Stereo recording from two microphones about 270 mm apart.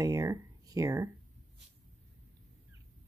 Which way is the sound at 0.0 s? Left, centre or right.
Centre.